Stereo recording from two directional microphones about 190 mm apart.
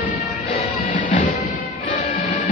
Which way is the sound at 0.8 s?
45° left (ahead or behind).